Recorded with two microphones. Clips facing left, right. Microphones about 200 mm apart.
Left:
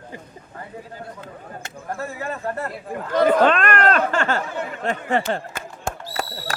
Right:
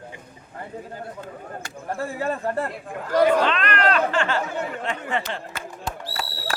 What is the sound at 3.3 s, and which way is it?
Speech, 50° left (ahead or behind).